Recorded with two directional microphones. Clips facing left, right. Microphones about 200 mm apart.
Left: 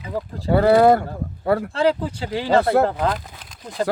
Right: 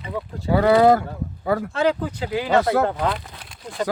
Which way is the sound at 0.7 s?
50° left (ahead or behind).